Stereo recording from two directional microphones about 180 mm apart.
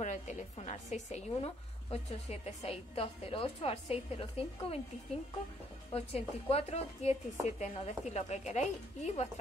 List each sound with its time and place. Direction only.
0.0 s a woman's voice: 40° left (ahead or behind)
5.9 s a woman's voice: 35° left (ahead or behind)